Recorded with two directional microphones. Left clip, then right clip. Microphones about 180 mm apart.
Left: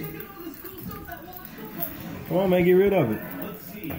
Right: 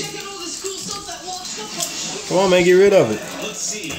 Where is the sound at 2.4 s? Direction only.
30° right (ahead or behind).